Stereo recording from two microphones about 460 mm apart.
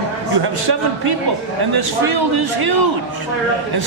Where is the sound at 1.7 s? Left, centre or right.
Right.